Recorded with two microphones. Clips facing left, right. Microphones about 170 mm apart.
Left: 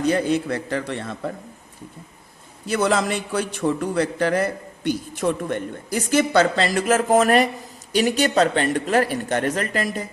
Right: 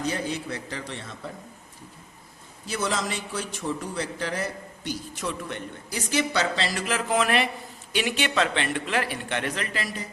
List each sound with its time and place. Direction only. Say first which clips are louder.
0.0 s a man's voice: left 9 dB; 60° left (ahead or behind)
2.6 s a man's voice: left 8 dB; 60° left (ahead or behind)